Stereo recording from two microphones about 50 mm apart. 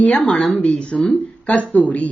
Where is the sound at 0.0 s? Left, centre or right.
Left.